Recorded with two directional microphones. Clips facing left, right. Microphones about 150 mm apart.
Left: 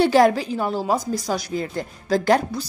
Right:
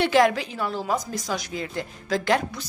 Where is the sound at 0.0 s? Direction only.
35° left (ahead or behind).